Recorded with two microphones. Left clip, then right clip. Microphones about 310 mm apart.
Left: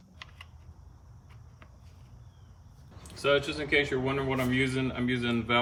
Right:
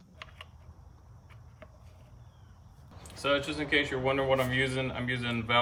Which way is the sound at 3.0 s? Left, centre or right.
Centre.